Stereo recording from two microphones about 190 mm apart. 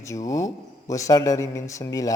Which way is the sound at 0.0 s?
15° left (ahead or behind).